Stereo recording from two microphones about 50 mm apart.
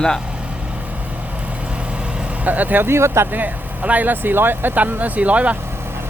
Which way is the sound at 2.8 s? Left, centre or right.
Right.